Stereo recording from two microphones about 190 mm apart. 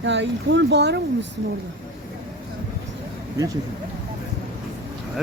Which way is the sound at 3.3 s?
20° right (ahead or behind).